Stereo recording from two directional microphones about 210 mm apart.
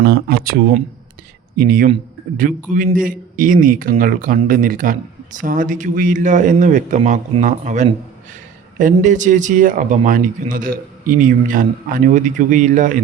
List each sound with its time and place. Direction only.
0.0 s speech: 50° right (ahead or behind)
1.5 s a man's voice: 45° right (ahead or behind)